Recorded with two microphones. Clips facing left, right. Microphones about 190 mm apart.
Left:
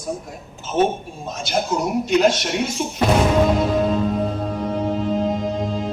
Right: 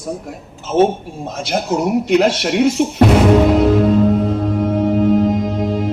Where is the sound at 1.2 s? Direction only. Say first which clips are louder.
Right 3 dB; 60° right (ahead or behind).